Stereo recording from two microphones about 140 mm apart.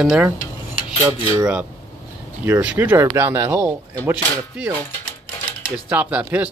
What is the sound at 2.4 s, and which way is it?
Speech, 10° right (ahead or behind).